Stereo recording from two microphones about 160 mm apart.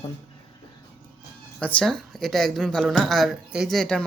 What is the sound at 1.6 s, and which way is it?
Speech, 10° left (ahead or behind).